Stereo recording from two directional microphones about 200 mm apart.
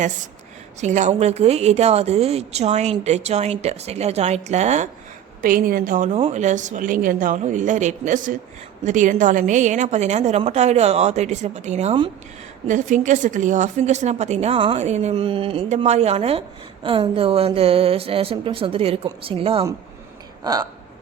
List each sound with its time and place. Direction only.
0.8 s speech: 35° right (ahead or behind)
12.6 s a woman's voice: 40° right (ahead or behind); by 20.7 s 20° right (ahead or behind)